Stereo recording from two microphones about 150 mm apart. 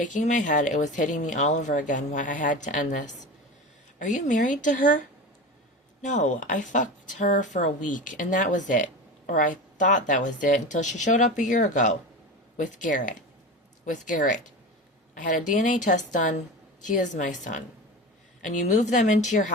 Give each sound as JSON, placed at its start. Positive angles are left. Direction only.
{"t": 0.0, "sound": "speech", "side_deg": 55}